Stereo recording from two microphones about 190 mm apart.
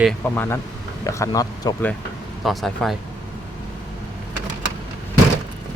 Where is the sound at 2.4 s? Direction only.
Centre (ahead or behind).